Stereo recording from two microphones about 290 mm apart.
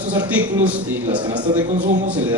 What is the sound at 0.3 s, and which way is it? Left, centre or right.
Speech, centre.